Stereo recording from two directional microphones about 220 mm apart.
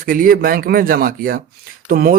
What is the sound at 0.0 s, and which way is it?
Speech, 40° right (ahead or behind).